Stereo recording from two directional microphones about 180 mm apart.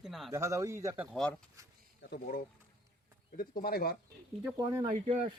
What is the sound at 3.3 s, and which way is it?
Speech, 55° left (ahead or behind).